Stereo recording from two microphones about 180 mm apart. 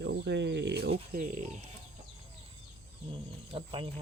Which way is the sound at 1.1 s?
50° right (ahead or behind).